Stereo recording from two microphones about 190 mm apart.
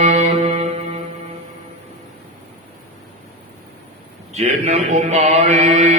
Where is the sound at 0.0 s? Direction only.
35° right (ahead or behind).